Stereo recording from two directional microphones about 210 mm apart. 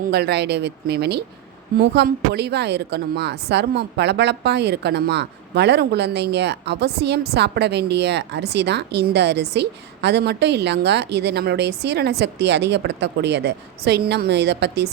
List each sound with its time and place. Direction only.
0.1 s speech: 50° right (ahead or behind)